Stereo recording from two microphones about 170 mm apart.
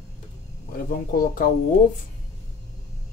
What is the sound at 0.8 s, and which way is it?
Speech, 55° left (ahead or behind).